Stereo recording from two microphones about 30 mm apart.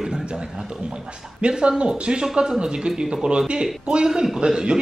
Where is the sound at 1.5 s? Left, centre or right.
Right.